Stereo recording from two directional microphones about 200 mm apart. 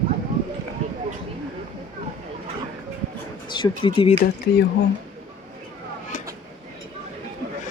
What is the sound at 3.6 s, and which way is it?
Speech, 25° left (ahead or behind).